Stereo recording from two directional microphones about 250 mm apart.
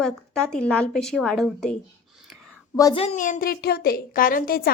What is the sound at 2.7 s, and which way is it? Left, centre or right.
A woman's voice, centre.